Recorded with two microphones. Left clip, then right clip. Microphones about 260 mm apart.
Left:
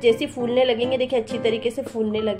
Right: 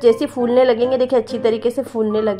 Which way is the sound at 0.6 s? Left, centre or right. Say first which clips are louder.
Right 5 dB; right.